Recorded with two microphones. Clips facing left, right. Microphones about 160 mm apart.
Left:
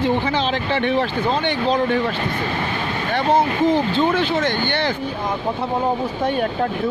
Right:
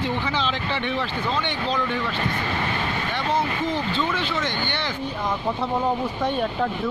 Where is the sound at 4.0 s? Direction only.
45° left (ahead or behind).